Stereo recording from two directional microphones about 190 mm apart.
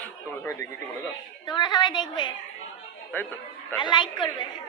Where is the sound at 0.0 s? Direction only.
15° left (ahead or behind).